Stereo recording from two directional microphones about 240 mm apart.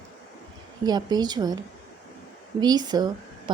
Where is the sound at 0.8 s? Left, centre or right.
Centre.